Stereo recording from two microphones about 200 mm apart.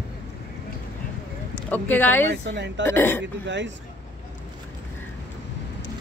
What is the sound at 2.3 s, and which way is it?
Speech, 60° right (ahead or behind).